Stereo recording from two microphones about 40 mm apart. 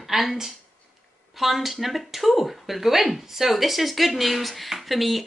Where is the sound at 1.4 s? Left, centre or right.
Centre.